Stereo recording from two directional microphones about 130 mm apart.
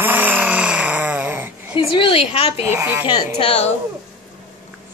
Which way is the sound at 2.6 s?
15° right (ahead or behind).